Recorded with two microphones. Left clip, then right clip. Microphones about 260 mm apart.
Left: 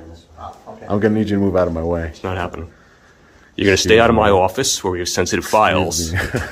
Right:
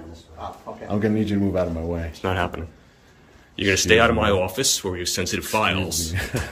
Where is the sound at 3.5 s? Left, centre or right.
Left.